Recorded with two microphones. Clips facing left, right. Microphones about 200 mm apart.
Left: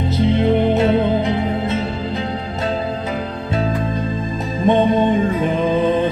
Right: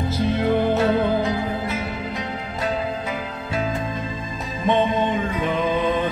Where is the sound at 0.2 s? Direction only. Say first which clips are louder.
Left 5 dB; 20° left (ahead or behind).